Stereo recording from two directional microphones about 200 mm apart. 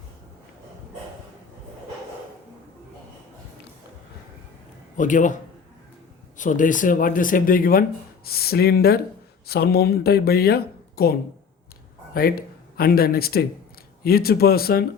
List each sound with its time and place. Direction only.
4.9 s a man's voice: 40° left (ahead or behind)